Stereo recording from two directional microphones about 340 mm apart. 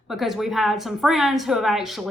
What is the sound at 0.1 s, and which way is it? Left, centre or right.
A woman's voice, centre.